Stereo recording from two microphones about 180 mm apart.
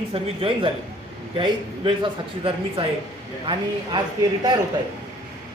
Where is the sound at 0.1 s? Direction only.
30° right (ahead or behind).